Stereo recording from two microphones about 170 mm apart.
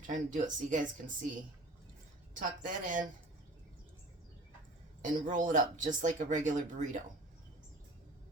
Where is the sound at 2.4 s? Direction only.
50° right (ahead or behind).